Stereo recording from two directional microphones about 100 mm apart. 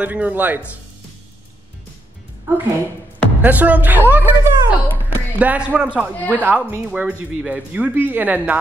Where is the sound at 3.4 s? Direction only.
15° right (ahead or behind).